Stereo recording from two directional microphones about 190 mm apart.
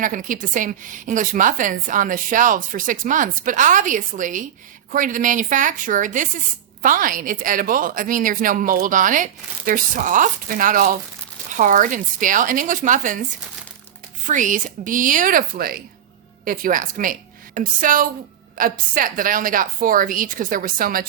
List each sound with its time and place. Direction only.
0.0 s a woman's voice: 45° right (ahead or behind)
14.3 s a woman's voice: 40° right (ahead or behind)